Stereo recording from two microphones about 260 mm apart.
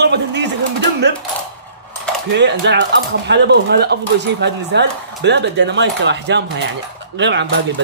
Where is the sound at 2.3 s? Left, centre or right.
Right.